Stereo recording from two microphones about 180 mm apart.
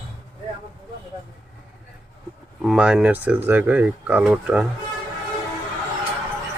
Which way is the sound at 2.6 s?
5° right (ahead or behind).